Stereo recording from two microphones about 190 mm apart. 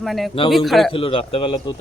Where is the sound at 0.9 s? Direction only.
30° left (ahead or behind).